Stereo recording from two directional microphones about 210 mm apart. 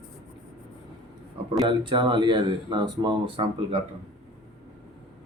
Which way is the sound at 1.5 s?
20° right (ahead or behind).